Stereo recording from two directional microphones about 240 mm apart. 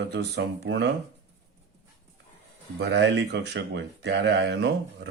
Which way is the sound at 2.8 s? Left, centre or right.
Right.